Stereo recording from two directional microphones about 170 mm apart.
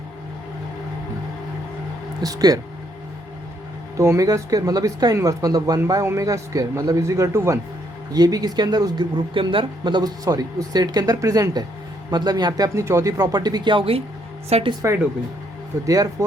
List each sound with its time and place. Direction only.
2.2 s speech: 20° right (ahead or behind)
3.9 s speech: 15° right (ahead or behind)